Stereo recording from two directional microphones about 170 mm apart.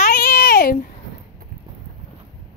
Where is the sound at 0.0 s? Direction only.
55° left (ahead or behind).